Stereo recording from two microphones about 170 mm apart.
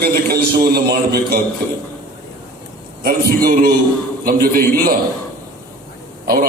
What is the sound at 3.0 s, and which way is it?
A man's voice, 65° right (ahead or behind).